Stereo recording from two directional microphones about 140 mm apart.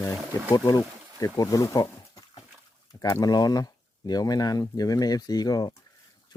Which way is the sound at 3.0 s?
25° left (ahead or behind).